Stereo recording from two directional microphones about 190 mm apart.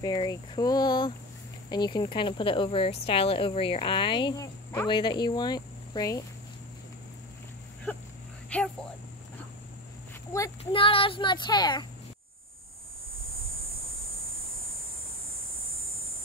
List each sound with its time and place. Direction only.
0.0 s speech: 20° left (ahead or behind)
8.5 s speech: 5° left (ahead or behind)
10.6 s speech: 30° left (ahead or behind)